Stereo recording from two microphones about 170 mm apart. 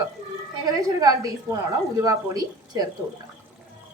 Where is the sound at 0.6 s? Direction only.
20° right (ahead or behind).